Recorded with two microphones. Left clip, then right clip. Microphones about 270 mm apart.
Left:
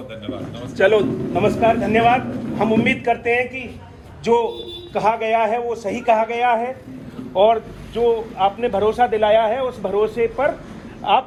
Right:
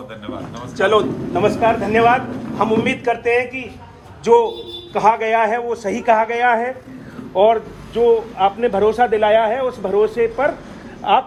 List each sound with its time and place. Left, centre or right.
0.8 s a man's voice: centre; by 11.3 s right